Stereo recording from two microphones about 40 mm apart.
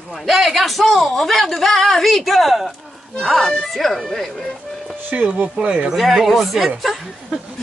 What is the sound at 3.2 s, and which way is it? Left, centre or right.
Speech, centre.